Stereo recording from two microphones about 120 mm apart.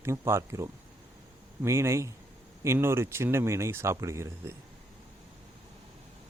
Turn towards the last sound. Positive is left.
turn(degrees=-25)  # may be behind; listen again after turning